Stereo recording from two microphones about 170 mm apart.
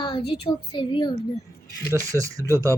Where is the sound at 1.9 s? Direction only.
20° right (ahead or behind).